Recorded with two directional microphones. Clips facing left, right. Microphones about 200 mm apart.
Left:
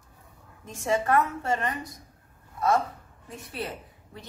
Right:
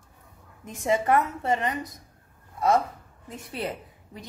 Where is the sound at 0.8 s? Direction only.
20° right (ahead or behind).